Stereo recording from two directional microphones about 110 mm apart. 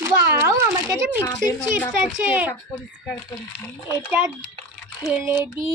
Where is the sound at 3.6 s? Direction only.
25° left (ahead or behind).